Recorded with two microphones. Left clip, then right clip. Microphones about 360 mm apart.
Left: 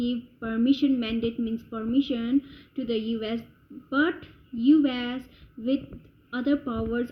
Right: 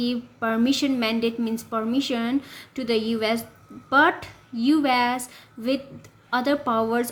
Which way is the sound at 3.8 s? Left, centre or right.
Right.